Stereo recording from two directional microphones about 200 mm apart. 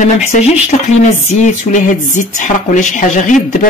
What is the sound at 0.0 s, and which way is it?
Speech, 35° left (ahead or behind).